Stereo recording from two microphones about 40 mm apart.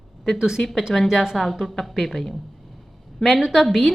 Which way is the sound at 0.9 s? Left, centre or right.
Centre.